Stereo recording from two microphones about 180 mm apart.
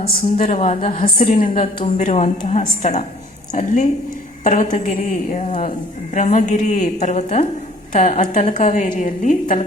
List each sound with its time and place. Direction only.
0.2 s a woman's voice: 40° left (ahead or behind)